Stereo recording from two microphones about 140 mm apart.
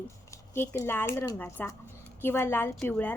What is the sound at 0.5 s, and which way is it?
A woman's voice, 15° left (ahead or behind).